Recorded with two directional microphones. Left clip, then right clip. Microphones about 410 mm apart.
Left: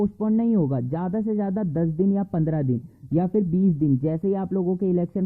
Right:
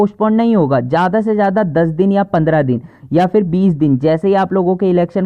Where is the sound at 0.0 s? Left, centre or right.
Centre.